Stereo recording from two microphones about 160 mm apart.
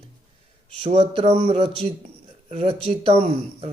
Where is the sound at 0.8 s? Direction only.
35° right (ahead or behind).